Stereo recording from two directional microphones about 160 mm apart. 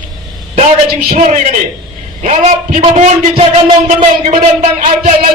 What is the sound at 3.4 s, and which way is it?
Music, 35° right (ahead or behind).